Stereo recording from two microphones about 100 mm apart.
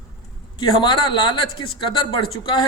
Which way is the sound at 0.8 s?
50° left (ahead or behind).